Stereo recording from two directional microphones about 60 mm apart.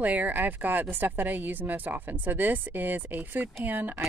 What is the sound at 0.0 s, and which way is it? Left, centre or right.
A woman's voice, right.